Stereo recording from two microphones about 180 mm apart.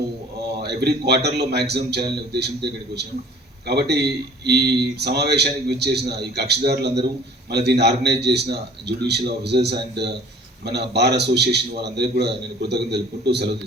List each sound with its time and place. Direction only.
0.6 s a man's voice: 65° right (ahead or behind)